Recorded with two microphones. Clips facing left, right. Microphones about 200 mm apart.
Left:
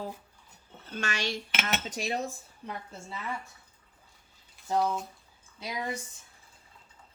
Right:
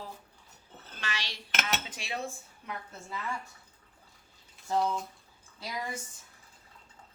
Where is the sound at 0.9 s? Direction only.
45° left (ahead or behind).